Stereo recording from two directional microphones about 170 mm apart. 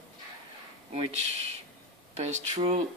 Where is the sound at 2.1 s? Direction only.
40° right (ahead or behind).